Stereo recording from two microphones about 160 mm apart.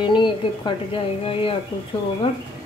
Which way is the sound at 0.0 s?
30° left (ahead or behind).